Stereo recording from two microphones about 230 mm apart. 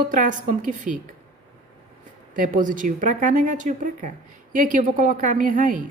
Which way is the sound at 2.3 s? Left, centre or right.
Right.